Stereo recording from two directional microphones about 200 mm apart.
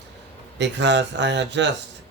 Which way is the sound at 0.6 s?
60° right (ahead or behind).